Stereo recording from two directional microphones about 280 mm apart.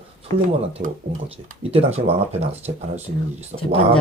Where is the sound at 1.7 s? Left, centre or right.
Right.